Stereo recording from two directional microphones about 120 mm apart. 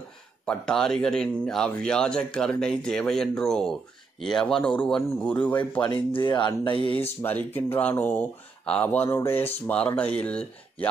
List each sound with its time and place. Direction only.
0.5 s speech: 5° left (ahead or behind)
5.9 s speech: 40° left (ahead or behind)
7.2 s speech: 15° left (ahead or behind)